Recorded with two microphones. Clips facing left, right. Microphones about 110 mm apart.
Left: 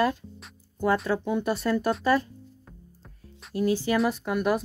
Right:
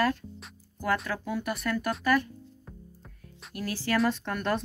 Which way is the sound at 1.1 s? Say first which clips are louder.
Left 6 dB; 25° left (ahead or behind).